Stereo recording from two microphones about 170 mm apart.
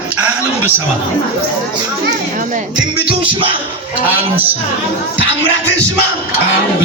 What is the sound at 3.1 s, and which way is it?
Speech, 30° right (ahead or behind).